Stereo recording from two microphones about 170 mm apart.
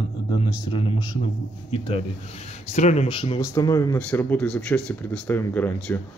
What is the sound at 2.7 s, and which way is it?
Speech, 40° left (ahead or behind).